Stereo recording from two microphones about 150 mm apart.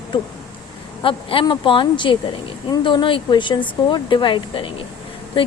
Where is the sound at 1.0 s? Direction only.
35° left (ahead or behind).